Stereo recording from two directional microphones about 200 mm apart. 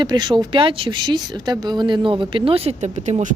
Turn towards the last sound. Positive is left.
turn(degrees=-35)  # may be behind; listen again after turning